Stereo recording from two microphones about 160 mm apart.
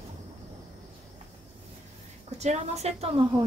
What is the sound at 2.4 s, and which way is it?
Speech, 45° right (ahead or behind).